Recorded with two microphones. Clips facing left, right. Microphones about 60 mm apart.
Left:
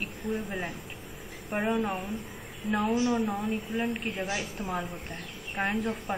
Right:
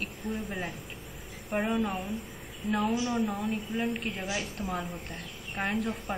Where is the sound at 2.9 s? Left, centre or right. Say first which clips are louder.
Left 4 dB; left.